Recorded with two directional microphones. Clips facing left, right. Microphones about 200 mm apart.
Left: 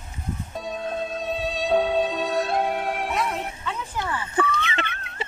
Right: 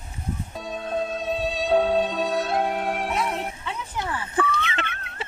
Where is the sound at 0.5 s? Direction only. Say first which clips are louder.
Right 1 dB; centre (ahead or behind).